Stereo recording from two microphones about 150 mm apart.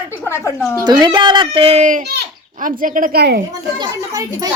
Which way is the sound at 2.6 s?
65° right (ahead or behind).